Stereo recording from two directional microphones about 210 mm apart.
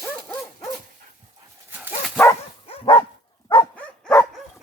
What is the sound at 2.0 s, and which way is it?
Dog, 10° left (ahead or behind).